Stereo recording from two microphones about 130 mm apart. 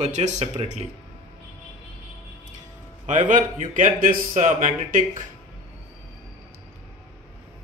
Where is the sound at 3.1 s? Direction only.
75° right (ahead or behind).